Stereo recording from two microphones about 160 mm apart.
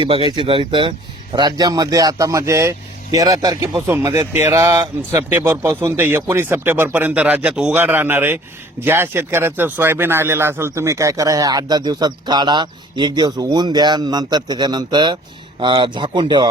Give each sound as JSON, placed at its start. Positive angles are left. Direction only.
{"t": 0.0, "sound": "speech", "side_deg": -35}